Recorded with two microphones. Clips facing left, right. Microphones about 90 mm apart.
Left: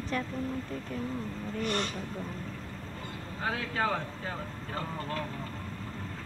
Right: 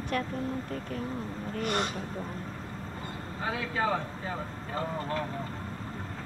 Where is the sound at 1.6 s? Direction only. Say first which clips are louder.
Right 2 dB; 15° right (ahead or behind).